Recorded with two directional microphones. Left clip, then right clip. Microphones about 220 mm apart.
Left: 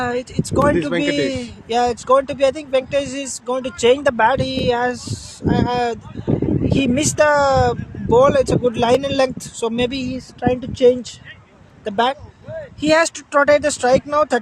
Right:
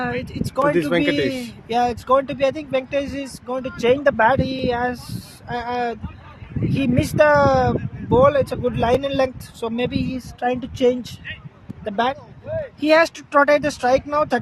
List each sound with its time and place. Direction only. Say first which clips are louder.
0.0 s speech: left 4 dB; 15° left (ahead or behind)
0.8 s speech: right 1 dB; 20° right (ahead or behind)
1.0 s speech: left 1 dB; 15° left (ahead or behind)
12.5 s a sound: right 4 dB; 50° right (ahead or behind)
12.8 s speech: even; 15° left (ahead or behind)